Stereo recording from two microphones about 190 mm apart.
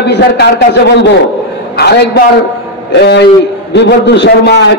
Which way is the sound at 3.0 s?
60° left (ahead or behind).